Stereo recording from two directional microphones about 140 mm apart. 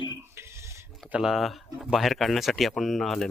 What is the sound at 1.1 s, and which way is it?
Speech, 5° right (ahead or behind).